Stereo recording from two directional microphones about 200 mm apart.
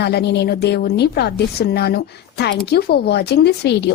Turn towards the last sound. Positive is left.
turn(degrees=55)  # may be behind; listen again after turning